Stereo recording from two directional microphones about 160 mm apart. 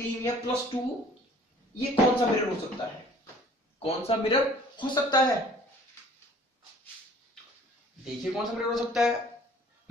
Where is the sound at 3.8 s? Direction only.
40° left (ahead or behind).